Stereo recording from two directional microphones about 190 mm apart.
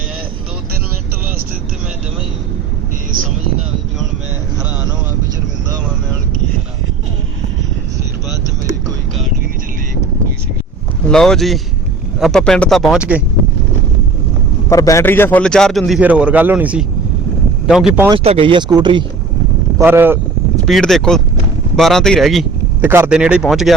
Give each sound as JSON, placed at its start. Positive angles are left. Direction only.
{"t": 11.1, "sound": "a man's voice", "side_deg": 5}
{"t": 14.7, "sound": "a man's voice", "side_deg": 15}
{"t": 18.1, "sound": "speech", "side_deg": -30}
{"t": 19.8, "sound": "speech", "side_deg": -10}
{"t": 20.7, "sound": "a man's voice", "side_deg": 0}
{"t": 22.8, "sound": "a man's voice", "side_deg": -10}